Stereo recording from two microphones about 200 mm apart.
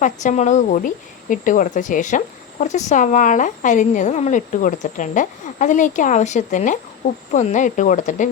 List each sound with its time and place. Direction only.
0.0 s speech: 40° left (ahead or behind)